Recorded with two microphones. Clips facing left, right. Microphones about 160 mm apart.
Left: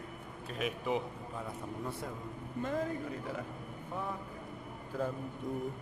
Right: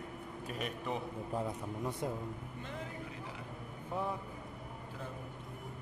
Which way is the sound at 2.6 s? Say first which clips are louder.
Left 13 dB; 45° left (ahead or behind).